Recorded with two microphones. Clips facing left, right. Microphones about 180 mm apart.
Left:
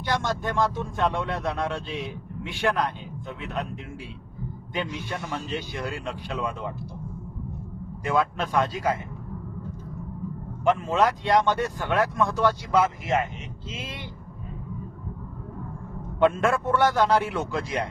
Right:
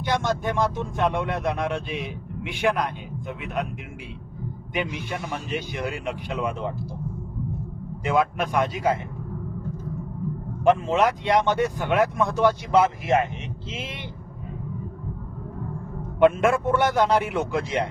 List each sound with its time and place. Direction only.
0.0 s speech: 20° right (ahead or behind)
4.7 s speech: 15° right (ahead or behind)
8.0 s speech: 20° right (ahead or behind)
10.6 s speech: 25° right (ahead or behind)
16.2 s speech: 20° right (ahead or behind)